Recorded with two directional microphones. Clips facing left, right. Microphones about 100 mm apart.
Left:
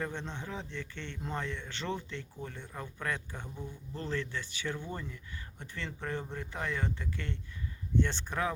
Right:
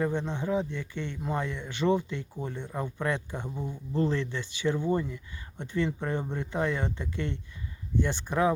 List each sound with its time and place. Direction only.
0.0 s speech: 15° right (ahead or behind)
3.5 s speech: 50° right (ahead or behind)
3.9 s speech: 20° right (ahead or behind)